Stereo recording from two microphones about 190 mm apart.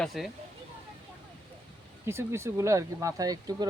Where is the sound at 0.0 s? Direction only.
Centre (ahead or behind).